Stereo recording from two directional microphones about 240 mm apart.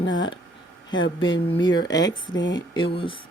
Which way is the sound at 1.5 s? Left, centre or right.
Centre.